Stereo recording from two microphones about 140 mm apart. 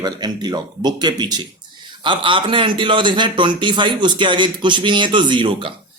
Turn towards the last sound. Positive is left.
turn(degrees=-40)  # may be behind; listen again after turning